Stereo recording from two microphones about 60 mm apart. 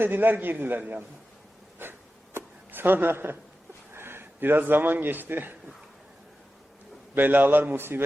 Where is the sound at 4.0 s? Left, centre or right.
Right.